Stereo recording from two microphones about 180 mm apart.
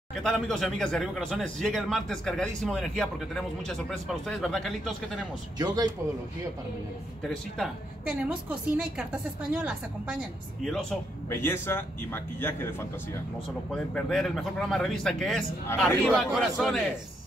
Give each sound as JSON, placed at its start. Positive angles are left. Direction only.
{"t": 0.1, "sound": "speech", "side_deg": 5}
{"t": 5.6, "sound": "speech", "side_deg": -20}
{"t": 7.2, "sound": "a woman's voice", "side_deg": 0}
{"t": 13.7, "sound": "speech", "side_deg": 5}